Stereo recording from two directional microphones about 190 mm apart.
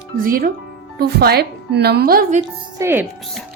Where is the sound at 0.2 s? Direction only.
50° right (ahead or behind).